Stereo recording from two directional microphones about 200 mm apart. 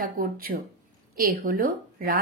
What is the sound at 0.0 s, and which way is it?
Speech, 45° right (ahead or behind).